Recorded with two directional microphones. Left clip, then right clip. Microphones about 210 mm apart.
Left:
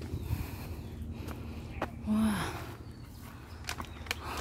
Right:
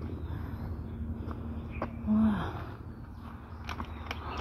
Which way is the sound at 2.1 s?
30° left (ahead or behind).